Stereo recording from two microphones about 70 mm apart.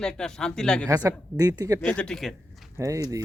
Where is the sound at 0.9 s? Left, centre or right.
Right.